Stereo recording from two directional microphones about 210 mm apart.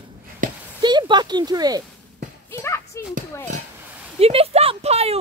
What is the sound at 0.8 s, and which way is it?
Speech, 20° right (ahead or behind).